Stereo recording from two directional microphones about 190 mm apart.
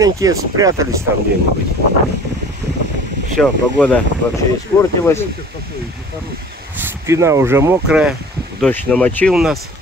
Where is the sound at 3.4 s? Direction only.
5° left (ahead or behind).